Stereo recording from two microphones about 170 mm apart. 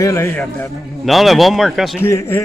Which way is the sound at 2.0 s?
15° left (ahead or behind).